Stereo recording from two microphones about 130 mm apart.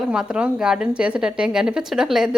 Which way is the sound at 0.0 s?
5° right (ahead or behind).